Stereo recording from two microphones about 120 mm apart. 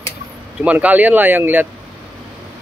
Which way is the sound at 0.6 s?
10° right (ahead or behind).